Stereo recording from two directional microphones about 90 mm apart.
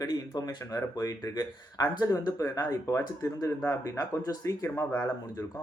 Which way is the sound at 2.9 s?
35° left (ahead or behind).